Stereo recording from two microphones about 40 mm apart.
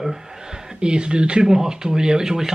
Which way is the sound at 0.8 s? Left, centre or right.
Right.